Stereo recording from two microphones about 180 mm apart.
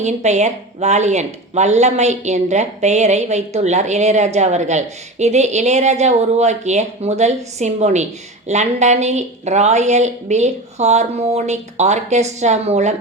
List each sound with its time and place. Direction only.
0.0 s speech: 40° right (ahead or behind)